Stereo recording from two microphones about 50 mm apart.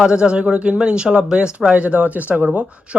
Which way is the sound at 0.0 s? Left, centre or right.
Centre.